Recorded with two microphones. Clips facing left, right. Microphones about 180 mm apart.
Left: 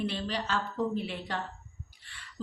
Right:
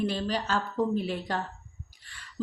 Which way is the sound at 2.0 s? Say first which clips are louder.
Right 1 dB; 40° right (ahead or behind).